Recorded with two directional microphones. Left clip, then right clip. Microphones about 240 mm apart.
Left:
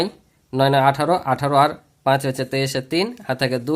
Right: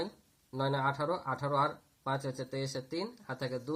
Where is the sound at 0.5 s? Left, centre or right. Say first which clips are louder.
Left 17 dB; left.